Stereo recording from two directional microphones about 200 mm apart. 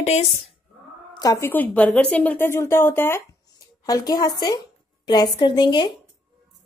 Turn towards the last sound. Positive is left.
turn(degrees=20)  # may be behind; listen again after turning